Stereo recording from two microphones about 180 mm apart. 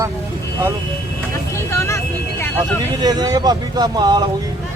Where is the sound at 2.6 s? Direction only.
20° right (ahead or behind).